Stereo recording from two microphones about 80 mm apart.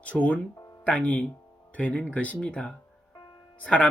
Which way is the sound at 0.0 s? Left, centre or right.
Centre.